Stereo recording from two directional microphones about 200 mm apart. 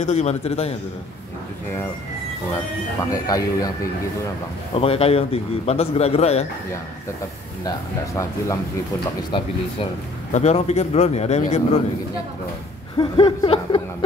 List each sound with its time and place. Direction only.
0.0 s a man's voice: 35° left (ahead or behind)
3.1 s speech: 20° left (ahead or behind)
4.7 s a man's voice: 30° left (ahead or behind)
7.6 s speech: 15° left (ahead or behind)
9.3 s a man's voice: 25° left (ahead or behind)
12.9 s speech: 25° left (ahead or behind)